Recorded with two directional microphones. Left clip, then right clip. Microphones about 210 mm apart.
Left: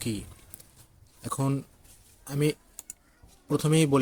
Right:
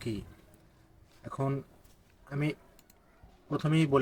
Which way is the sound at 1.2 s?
45° left (ahead or behind).